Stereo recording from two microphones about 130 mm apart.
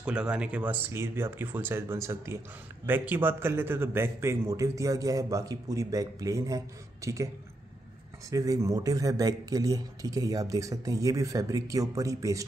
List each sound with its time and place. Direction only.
0.0 s a man's voice: 5° right (ahead or behind); by 7.2 s 25° right (ahead or behind)
8.3 s a man's voice: 25° right (ahead or behind)